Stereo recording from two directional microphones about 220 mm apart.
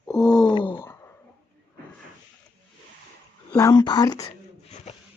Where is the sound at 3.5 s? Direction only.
15° left (ahead or behind).